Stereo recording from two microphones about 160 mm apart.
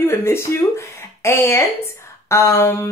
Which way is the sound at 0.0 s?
15° left (ahead or behind).